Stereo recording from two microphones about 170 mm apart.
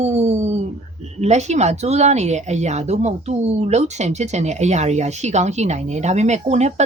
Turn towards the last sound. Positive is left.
turn(degrees=-40)  # may be behind; listen again after turning